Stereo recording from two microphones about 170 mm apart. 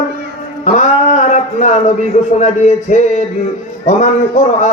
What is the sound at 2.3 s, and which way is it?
Speech, 45° left (ahead or behind).